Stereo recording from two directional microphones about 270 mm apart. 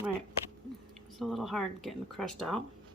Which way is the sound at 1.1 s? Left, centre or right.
Centre.